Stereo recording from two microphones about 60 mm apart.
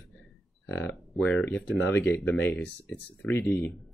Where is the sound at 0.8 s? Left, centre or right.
Left.